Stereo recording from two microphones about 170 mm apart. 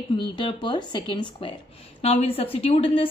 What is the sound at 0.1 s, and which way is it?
A woman's voice, 30° left (ahead or behind).